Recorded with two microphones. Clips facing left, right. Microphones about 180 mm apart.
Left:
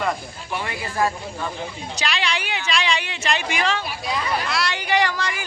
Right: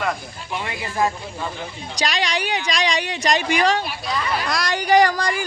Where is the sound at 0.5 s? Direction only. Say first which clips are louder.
Even; 20° right (ahead or behind).